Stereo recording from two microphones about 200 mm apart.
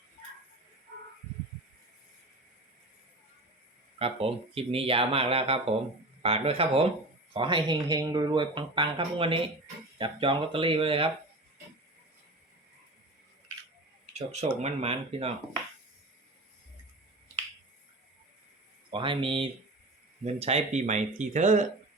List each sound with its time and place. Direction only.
3.9 s speech: 30° right (ahead or behind)
14.1 s speech: 35° right (ahead or behind)
18.9 s speech: 25° right (ahead or behind)